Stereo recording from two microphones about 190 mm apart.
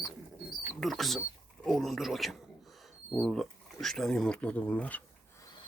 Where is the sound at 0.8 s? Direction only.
Centre (ahead or behind).